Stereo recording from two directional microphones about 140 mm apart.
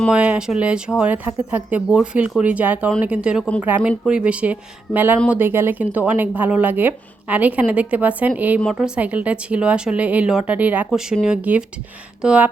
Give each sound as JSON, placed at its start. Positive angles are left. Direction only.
{"t": 0.1, "sound": "a woman's voice", "side_deg": -10}